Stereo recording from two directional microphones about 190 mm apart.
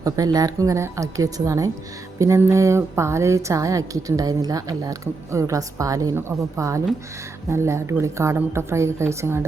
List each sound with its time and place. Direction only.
0.0 s a woman's voice: 20° right (ahead or behind)